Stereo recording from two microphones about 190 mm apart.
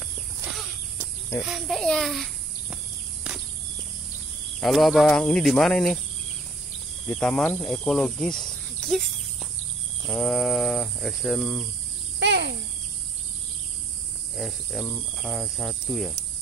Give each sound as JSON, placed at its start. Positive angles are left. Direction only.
{"t": 1.4, "sound": "a child's voice", "side_deg": 0}
{"t": 4.6, "sound": "speech", "side_deg": 0}
{"t": 7.1, "sound": "speech", "side_deg": 5}
{"t": 10.0, "sound": "speech", "side_deg": 10}
{"t": 12.2, "sound": "a sound", "side_deg": -65}
{"t": 14.3, "sound": "speech", "side_deg": 0}